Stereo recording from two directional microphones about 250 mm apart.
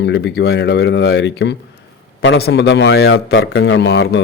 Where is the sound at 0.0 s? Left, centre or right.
Left.